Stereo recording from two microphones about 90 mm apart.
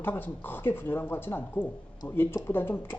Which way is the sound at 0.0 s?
20° left (ahead or behind).